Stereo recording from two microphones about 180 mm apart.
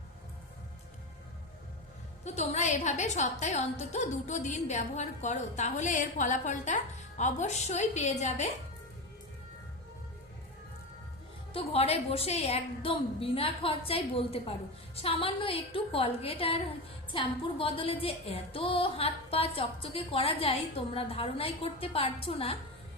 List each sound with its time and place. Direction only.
2.2 s a woman's voice: 40° left (ahead or behind)
11.5 s a woman's voice: 35° left (ahead or behind)